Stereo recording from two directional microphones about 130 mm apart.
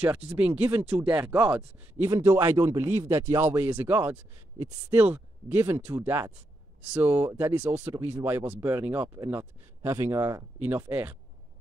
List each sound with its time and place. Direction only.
0.4 s speech: 15° right (ahead or behind)
2.0 s a man's voice: 20° right (ahead or behind)